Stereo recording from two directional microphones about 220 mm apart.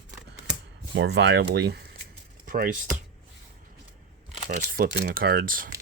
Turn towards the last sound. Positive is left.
turn(degrees=-40)  # may be behind; listen again after turning